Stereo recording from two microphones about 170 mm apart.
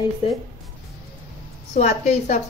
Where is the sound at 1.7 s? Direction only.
40° left (ahead or behind).